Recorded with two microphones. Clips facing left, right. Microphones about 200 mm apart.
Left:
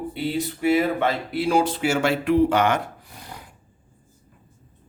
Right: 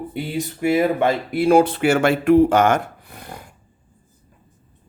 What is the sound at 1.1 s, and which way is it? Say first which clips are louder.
Speech: right 6 dB; 50° right (ahead or behind).